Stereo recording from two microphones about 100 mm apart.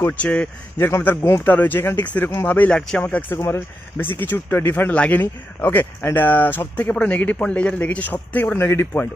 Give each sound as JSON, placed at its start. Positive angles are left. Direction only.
{"t": 0.0, "sound": "a man's voice", "side_deg": 15}